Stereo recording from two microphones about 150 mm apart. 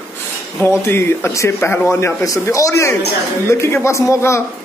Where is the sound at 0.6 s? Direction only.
15° left (ahead or behind).